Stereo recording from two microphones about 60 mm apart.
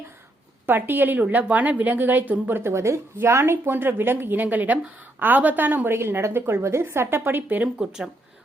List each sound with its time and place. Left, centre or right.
0.6 s a woman's voice: right
2.6 s a woman's voice: right
7.8 s speech: centre